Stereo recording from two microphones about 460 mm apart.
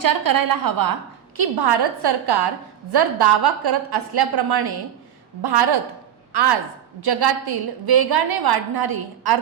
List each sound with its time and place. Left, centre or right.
0.0 s a woman's voice: right
1.4 s a woman's voice: right